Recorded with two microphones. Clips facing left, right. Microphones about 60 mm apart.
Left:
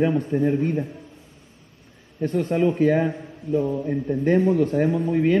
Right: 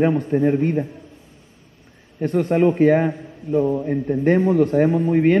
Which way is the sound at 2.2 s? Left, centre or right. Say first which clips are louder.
Right 4 dB; right.